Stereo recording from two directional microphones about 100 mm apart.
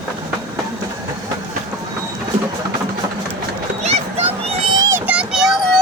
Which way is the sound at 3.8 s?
90° right.